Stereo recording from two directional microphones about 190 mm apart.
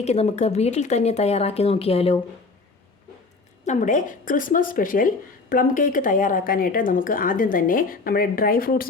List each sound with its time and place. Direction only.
0.0 s speech: 35° left (ahead or behind)
3.7 s speech: 40° left (ahead or behind)